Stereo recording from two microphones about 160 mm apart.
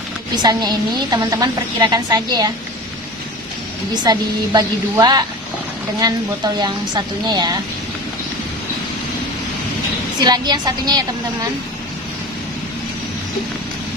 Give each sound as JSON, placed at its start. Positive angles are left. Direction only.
{"t": 0.3, "sound": "a woman's voice", "side_deg": -25}
{"t": 4.0, "sound": "a woman's voice", "side_deg": -25}
{"t": 10.2, "sound": "a woman's voice", "side_deg": -25}